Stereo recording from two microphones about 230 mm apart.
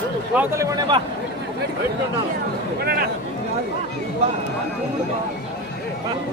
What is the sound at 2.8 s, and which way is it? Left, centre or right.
Speech, right.